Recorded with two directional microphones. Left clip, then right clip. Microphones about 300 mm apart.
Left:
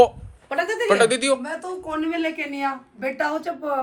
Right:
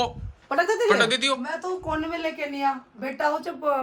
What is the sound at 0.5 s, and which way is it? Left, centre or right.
Speech, right.